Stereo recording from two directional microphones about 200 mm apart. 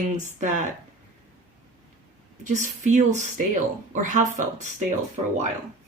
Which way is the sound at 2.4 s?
40° right (ahead or behind).